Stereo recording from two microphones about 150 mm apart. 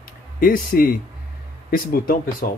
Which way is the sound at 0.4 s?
70° left (ahead or behind).